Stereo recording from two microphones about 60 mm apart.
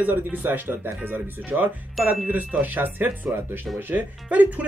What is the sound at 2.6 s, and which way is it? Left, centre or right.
Speech, right.